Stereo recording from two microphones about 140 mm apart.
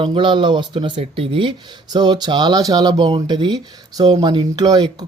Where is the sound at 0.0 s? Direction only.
35° right (ahead or behind).